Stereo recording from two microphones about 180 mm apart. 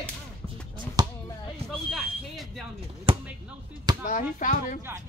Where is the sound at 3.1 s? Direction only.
25° right (ahead or behind).